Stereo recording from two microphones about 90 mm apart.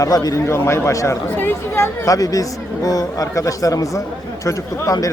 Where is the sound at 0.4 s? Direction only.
30° left (ahead or behind).